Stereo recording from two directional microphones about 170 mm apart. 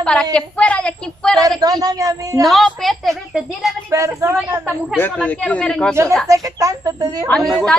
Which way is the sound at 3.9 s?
15° right (ahead or behind).